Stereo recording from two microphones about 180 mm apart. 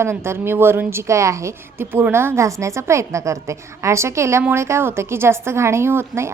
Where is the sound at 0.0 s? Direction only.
15° right (ahead or behind).